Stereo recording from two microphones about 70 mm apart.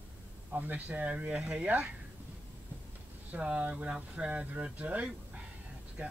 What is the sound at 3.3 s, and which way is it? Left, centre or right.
Speech, centre.